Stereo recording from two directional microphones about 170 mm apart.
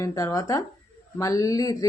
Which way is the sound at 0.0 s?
20° left (ahead or behind).